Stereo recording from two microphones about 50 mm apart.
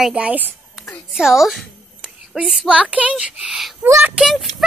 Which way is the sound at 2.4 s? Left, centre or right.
Centre.